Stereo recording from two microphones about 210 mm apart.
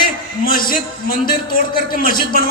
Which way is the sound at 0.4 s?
40° left (ahead or behind).